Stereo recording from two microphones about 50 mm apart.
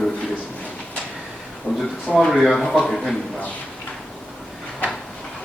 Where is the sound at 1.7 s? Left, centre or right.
Right.